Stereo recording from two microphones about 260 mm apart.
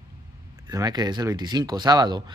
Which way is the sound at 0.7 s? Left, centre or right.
Centre.